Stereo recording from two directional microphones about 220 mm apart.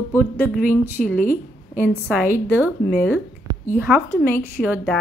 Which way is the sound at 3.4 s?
10° right (ahead or behind).